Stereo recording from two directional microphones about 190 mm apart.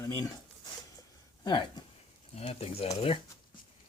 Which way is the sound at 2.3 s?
30° left (ahead or behind).